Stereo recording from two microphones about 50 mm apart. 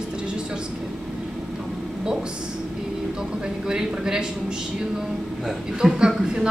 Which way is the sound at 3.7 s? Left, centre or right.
Centre.